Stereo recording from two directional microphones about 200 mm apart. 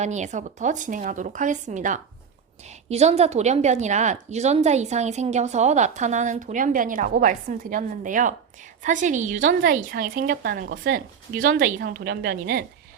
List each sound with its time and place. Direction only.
0.0 s a woman's voice: 35° right (ahead or behind); by 12.6 s 50° right (ahead or behind)